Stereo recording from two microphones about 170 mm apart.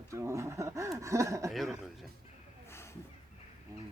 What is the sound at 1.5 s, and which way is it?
Speech, centre (ahead or behind).